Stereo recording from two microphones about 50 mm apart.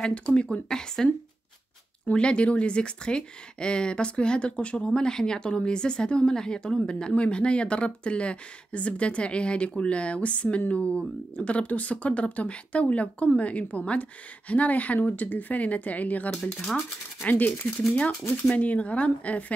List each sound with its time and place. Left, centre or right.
0.0 s speech: left
0.7 s speech: centre
2.1 s speech: left
16.3 s speech: centre
17.3 s speech: left